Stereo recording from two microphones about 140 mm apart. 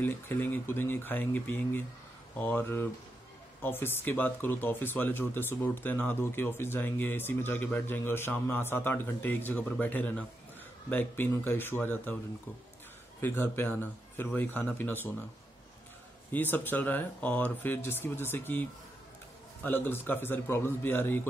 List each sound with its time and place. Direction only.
0.0 s speech: 15° left (ahead or behind)
13.2 s speech: 15° left (ahead or behind)
16.3 s speech: 15° left (ahead or behind)